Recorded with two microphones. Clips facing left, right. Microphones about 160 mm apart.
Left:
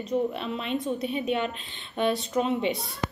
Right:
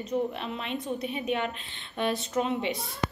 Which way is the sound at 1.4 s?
30° left (ahead or behind).